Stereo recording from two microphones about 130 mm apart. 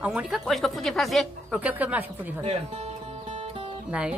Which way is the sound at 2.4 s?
55° right (ahead or behind).